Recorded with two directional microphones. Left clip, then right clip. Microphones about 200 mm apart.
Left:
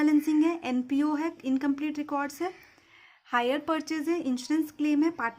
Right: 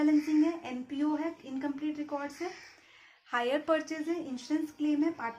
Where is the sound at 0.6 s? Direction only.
40° left (ahead or behind).